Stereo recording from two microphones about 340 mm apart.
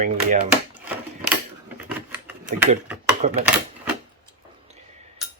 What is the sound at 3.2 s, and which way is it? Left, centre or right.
Speech, centre.